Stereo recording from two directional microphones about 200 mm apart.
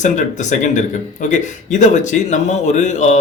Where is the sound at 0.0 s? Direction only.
35° left (ahead or behind).